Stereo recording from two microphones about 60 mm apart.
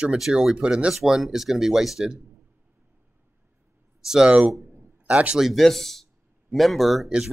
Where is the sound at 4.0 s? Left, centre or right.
Centre.